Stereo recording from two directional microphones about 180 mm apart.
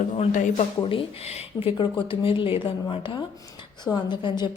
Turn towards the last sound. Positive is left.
turn(degrees=25)  # may be behind; listen again after turning